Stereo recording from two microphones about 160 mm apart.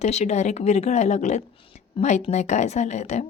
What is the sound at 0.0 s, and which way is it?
Speech, 45° left (ahead or behind).